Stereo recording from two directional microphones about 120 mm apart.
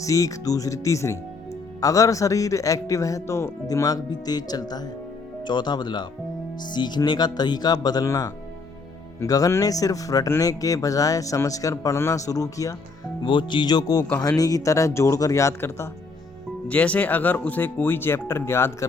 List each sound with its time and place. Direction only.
0.0 s speech: 25° left (ahead or behind)
13.2 s speech: 40° left (ahead or behind); by 15.9 s 25° left (ahead or behind)
16.6 s speech: 10° left (ahead or behind)